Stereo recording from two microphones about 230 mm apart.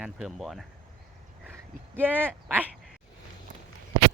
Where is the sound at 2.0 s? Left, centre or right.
Centre.